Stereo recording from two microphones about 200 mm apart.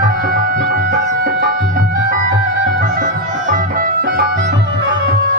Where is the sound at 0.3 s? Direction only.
45° right (ahead or behind).